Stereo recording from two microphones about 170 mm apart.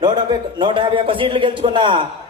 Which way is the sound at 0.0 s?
25° right (ahead or behind).